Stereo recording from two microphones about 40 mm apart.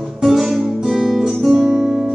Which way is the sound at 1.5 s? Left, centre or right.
Right.